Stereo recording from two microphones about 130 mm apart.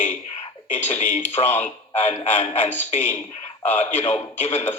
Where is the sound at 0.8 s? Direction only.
60° left (ahead or behind).